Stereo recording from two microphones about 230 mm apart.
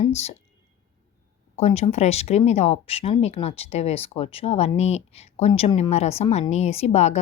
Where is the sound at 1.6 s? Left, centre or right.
Left.